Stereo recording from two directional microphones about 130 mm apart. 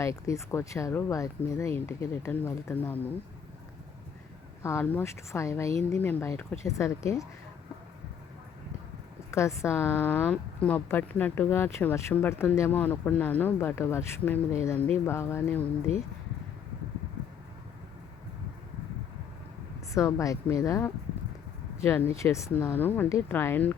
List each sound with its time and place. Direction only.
0.0 s speech: 25° left (ahead or behind)
4.6 s speech: 20° left (ahead or behind)
9.3 s speech: 20° left (ahead or behind)
19.9 s speech: 25° left (ahead or behind)